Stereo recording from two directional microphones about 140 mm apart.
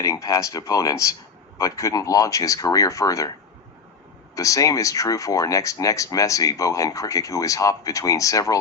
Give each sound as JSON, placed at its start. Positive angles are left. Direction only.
{"t": 0.0, "sound": "speech", "side_deg": 25}
{"t": 4.4, "sound": "speech", "side_deg": 25}